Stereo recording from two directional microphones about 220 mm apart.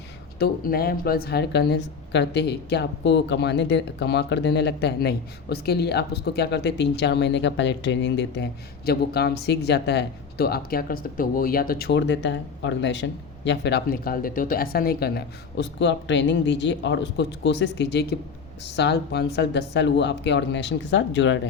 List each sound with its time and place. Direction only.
0.3 s a woman's voice: 45° left (ahead or behind)